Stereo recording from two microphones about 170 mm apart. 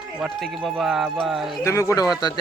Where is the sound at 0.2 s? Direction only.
Centre (ahead or behind).